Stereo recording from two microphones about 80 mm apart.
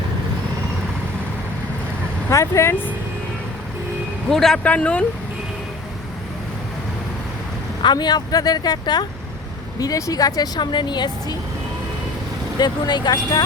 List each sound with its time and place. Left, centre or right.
2.3 s speech: left
4.3 s speech: centre
7.8 s speech: left
9.8 s speech: left
12.5 s speech: left